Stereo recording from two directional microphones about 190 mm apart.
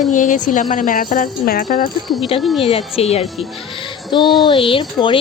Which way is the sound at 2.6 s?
30° left (ahead or behind).